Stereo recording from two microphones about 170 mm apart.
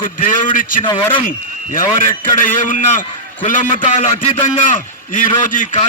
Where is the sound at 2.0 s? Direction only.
50° left (ahead or behind).